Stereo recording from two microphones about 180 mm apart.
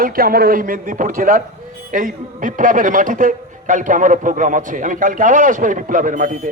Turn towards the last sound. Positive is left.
turn(degrees=-45)  # may be behind; listen again after turning